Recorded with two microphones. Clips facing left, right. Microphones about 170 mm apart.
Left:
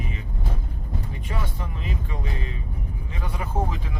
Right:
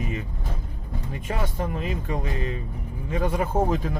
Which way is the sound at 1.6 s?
45° right (ahead or behind).